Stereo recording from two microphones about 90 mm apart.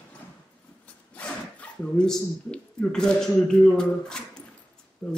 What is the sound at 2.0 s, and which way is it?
A man's voice, 10° left (ahead or behind).